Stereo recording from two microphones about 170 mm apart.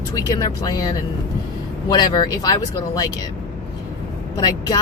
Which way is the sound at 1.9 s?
25° left (ahead or behind).